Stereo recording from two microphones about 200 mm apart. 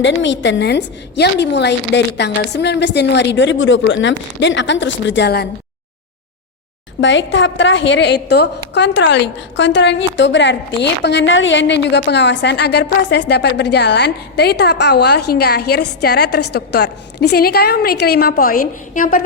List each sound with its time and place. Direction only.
0.0 s a woman's voice: 65° left (ahead or behind)
7.0 s a woman's voice: 70° left (ahead or behind); by 19.2 s 45° left (ahead or behind)